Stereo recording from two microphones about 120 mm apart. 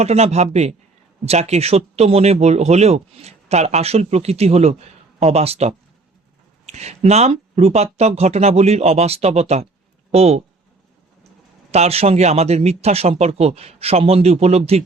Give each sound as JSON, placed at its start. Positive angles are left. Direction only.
{"t": 0.0, "sound": "speech", "side_deg": -65}
{"t": 11.7, "sound": "speech", "side_deg": -60}